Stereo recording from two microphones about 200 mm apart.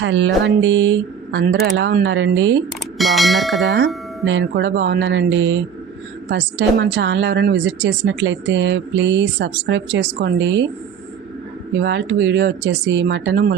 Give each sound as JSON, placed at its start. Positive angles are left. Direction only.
{"t": 0.0, "sound": "a woman's voice", "side_deg": -65}
{"t": 3.0, "sound": "speech", "side_deg": 0}
{"t": 4.3, "sound": "a woman's voice", "side_deg": -65}
{"t": 11.8, "sound": "a woman's voice", "side_deg": -65}